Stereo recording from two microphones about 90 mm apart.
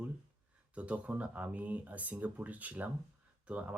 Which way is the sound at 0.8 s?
15° right (ahead or behind).